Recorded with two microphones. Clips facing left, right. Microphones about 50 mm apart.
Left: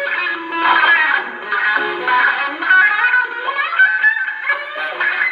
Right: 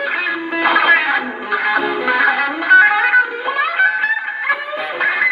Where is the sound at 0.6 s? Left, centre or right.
Centre.